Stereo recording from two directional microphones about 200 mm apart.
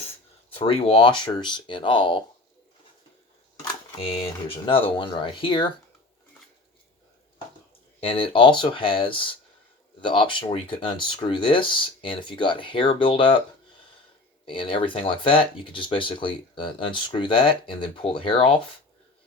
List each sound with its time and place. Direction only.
0.5 s speech: 30° left (ahead or behind)
3.6 s speech: 25° left (ahead or behind)
8.0 s speech: 25° left (ahead or behind)
14.4 s speech: 25° left (ahead or behind)